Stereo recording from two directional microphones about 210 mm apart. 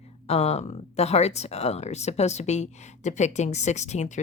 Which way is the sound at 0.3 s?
30° left (ahead or behind).